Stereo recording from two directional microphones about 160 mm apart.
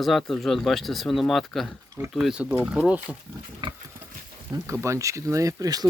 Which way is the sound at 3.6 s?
30° right (ahead or behind).